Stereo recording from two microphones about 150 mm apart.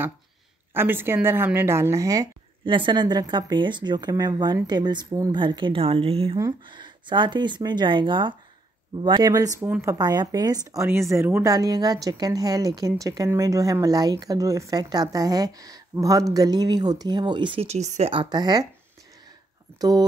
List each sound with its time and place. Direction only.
0.7 s a woman's voice: 15° right (ahead or behind); by 6.3 s 40° right (ahead or behind)
6.3 s a woman's voice: 25° right (ahead or behind); by 18.1 s 50° right (ahead or behind)
18.1 s a woman's voice: 30° right (ahead or behind)
19.8 s a woman's voice: 25° right (ahead or behind)